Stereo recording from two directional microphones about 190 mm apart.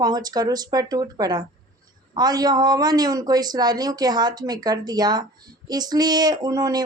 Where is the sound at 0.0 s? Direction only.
20° right (ahead or behind).